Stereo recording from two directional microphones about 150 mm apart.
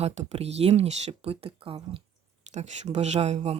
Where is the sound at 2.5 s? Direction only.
50° right (ahead or behind).